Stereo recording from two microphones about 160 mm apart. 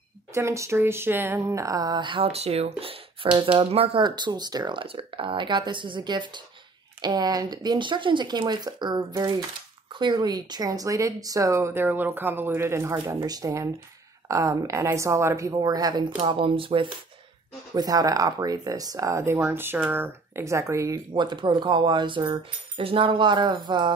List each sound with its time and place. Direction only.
0.3 s speech: 20° right (ahead or behind)
13.2 s speech: 25° right (ahead or behind)
17.7 s speech: 25° right (ahead or behind)
21.1 s speech: 30° right (ahead or behind)